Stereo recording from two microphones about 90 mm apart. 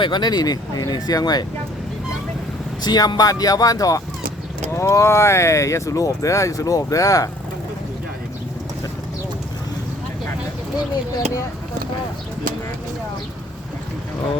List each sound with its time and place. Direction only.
0.0 s speech: 55° left (ahead or behind)
2.8 s speech: 50° left (ahead or behind)